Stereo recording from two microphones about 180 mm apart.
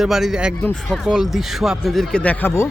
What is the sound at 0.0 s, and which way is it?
Speech, centre (ahead or behind).